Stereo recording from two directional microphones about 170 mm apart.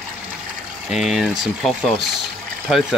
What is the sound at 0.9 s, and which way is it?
Speech, centre (ahead or behind).